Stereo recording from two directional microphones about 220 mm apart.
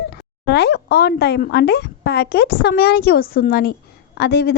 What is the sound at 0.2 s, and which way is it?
A woman's voice, 50° left (ahead or behind).